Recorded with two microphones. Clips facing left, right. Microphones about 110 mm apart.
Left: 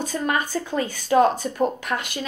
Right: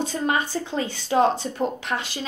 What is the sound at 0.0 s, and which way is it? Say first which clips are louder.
A woman's voice: even; 25° right (ahead or behind).